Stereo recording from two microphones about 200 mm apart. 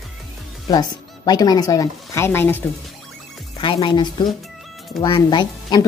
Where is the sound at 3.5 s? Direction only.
25° left (ahead or behind).